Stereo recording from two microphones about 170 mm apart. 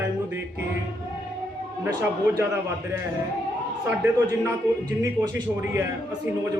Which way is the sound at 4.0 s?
15° right (ahead or behind).